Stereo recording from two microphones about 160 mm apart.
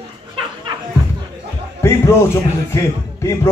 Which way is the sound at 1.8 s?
15° left (ahead or behind).